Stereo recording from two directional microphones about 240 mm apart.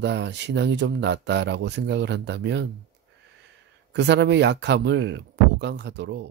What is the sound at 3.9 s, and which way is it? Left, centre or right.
Speech, right.